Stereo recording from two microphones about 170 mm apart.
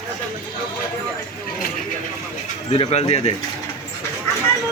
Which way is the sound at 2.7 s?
40° left (ahead or behind).